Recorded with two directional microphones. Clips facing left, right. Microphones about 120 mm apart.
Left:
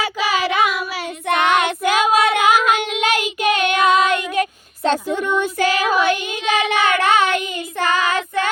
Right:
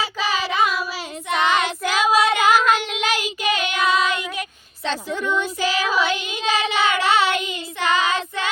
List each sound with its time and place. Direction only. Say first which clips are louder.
0.4 s child singing: left 2 dB; 65° left (ahead or behind); by 4.2 s 50° left (ahead or behind)
4.4 s a sound: left 10 dB; 50° left (ahead or behind)
5.0 s child singing: left 4 dB; 15° left (ahead or behind)
5.4 s child singing: left 4 dB; 55° left (ahead or behind)